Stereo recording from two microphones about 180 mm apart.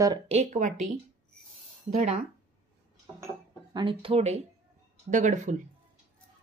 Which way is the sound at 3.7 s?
30° right (ahead or behind).